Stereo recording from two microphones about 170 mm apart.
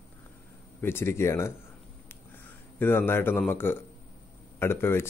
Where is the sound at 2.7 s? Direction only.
10° left (ahead or behind).